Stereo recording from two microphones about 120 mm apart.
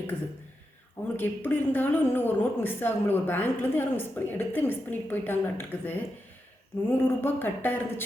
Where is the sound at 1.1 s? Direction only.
15° left (ahead or behind).